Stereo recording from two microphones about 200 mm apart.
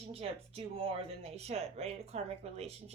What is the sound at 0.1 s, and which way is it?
Speech, 30° right (ahead or behind).